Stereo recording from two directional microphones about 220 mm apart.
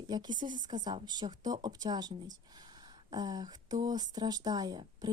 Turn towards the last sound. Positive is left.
turn(degrees=-20)  # may be behind; listen again after turning